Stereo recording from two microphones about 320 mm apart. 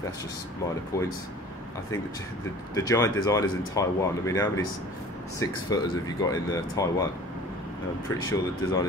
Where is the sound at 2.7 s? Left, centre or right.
Centre.